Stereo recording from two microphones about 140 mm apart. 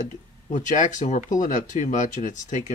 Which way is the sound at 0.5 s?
65° left (ahead or behind).